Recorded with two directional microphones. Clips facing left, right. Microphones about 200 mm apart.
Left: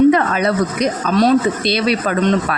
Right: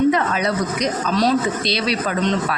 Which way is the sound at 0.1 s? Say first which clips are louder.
Left 4 dB; 55° left (ahead or behind).